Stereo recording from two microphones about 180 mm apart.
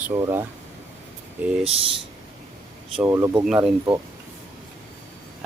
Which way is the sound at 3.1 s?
15° right (ahead or behind).